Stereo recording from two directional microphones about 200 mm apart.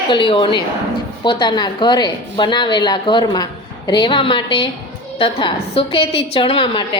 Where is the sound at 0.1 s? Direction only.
25° left (ahead or behind).